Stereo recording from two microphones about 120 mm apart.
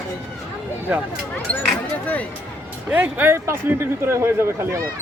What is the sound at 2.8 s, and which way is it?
A man's voice, 10° right (ahead or behind).